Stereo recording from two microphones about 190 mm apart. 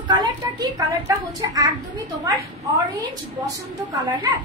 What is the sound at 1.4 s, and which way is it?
Speech, 20° right (ahead or behind).